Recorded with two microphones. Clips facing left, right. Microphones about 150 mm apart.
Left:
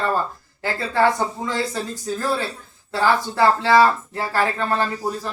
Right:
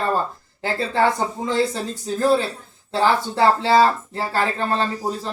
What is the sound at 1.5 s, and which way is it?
Speech, 20° right (ahead or behind).